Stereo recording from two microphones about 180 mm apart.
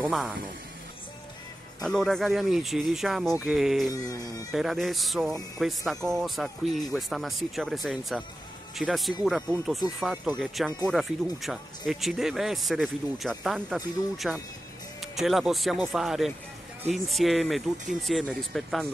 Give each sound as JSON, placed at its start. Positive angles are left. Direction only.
{"t": 0.0, "sound": "speech", "side_deg": -5}
{"t": 1.8, "sound": "speech", "side_deg": 5}
{"t": 3.9, "sound": "speech", "side_deg": 20}
{"t": 4.5, "sound": "speech", "side_deg": 0}